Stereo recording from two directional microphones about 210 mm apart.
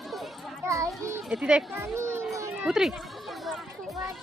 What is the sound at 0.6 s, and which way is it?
A child's voice, 15° right (ahead or behind).